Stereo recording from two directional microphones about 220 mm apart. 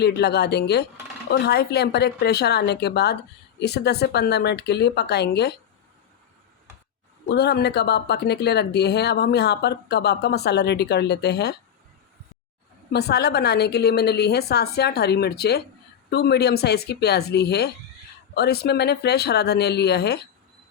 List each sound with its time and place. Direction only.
0.0 s speech: 50° left (ahead or behind)
7.3 s speech: 50° left (ahead or behind)
12.9 s speech: 45° left (ahead or behind)